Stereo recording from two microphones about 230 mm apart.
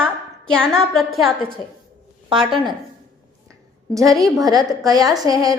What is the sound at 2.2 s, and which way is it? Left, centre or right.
Speech, right.